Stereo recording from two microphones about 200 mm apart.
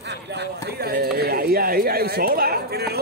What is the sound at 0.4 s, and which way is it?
A man's voice, 55° right (ahead or behind).